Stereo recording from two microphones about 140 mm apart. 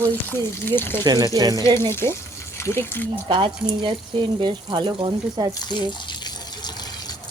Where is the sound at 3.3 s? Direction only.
35° right (ahead or behind).